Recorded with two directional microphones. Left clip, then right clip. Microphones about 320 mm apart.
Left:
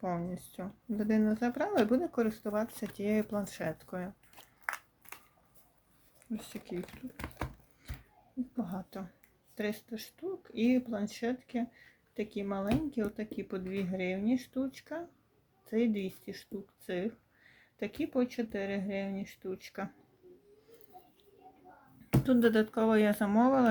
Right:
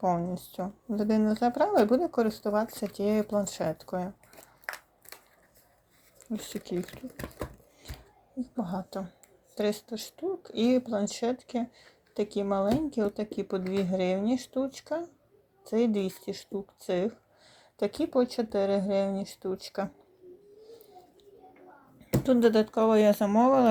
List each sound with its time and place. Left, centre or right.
0.0 s speech: centre
4.6 s a sound: centre
6.3 s speech: centre
8.5 s speech: centre
22.2 s speech: centre